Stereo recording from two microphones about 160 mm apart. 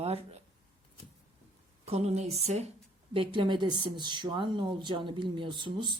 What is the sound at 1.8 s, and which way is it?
Speech, 40° right (ahead or behind).